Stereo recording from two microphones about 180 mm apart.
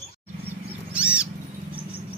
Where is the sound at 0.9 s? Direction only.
5° right (ahead or behind).